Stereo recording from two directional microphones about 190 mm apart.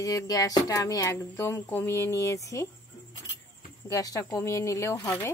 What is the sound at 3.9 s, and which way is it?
Speech, 15° left (ahead or behind).